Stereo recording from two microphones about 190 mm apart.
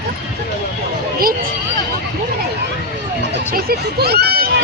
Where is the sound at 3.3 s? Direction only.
55° right (ahead or behind).